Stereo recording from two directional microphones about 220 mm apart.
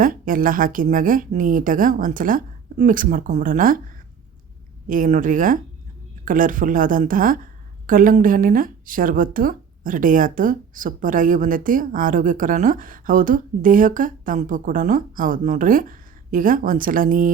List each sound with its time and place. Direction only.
0.0 s speech: 40° right (ahead or behind)
4.9 s speech: 35° right (ahead or behind)